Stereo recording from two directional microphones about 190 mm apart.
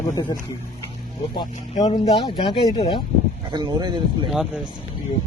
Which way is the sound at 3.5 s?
25° right (ahead or behind).